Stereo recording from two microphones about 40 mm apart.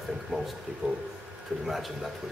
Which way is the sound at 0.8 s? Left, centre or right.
Right.